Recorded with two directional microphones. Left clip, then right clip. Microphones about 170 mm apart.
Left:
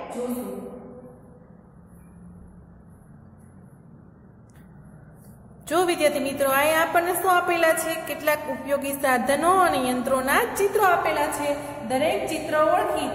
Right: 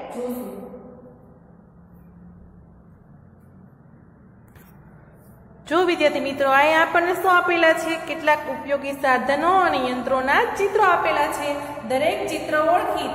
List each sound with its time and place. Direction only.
5.7 s a woman's voice: 10° left (ahead or behind)